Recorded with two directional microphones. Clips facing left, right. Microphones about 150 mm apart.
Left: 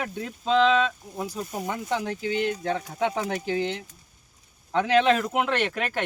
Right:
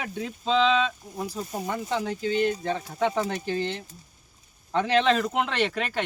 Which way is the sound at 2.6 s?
55° left (ahead or behind).